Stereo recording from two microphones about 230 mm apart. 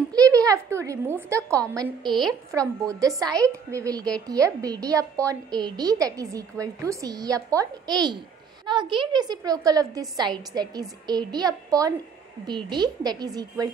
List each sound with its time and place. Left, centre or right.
0.1 s a woman's voice: centre